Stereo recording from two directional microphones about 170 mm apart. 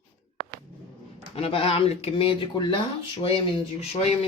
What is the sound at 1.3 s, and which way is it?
A man's voice, 35° left (ahead or behind).